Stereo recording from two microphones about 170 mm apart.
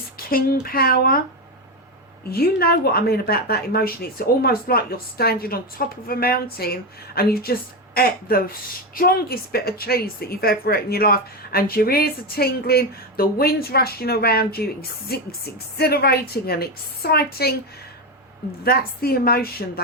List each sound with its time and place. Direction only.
0.2 s a woman's voice: 60° left (ahead or behind)
2.3 s a woman's voice: 65° left (ahead or behind)
18.6 s a woman's voice: 65° left (ahead or behind)